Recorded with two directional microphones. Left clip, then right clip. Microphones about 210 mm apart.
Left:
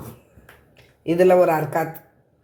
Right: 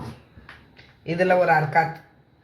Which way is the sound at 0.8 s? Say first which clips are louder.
Left 5 dB; 50° left (ahead or behind).